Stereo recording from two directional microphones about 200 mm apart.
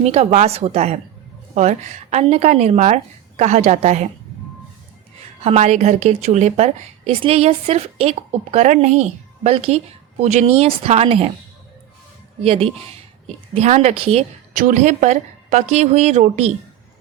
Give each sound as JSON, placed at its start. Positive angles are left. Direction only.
{"t": 0.0, "sound": "a woman's voice", "side_deg": -30}
{"t": 5.4, "sound": "a woman's voice", "side_deg": -35}
{"t": 12.4, "sound": "speech", "side_deg": -30}
{"t": 14.5, "sound": "a woman's voice", "side_deg": -40}